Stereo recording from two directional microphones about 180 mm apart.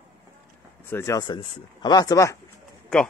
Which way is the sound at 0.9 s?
15° left (ahead or behind).